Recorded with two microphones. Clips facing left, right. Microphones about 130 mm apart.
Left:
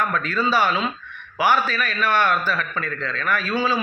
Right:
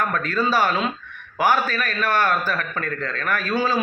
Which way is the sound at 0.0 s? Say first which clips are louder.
Even; 45° right (ahead or behind).